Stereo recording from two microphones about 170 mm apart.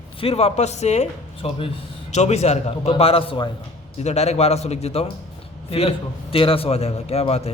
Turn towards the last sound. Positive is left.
turn(degrees=40)  # may be behind; listen again after turning